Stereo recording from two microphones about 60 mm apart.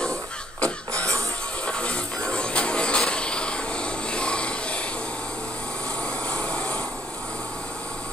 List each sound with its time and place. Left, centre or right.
0.6 s cough: left
1.7 s music: centre
6.2 s vehicle: centre